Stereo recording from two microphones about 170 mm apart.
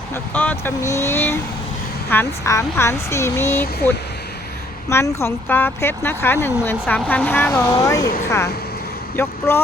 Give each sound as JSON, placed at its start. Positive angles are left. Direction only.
{"t": 0.1, "sound": "speech", "side_deg": 10}
{"t": 7.7, "sound": "speech", "side_deg": 20}
{"t": 9.2, "sound": "speech", "side_deg": 15}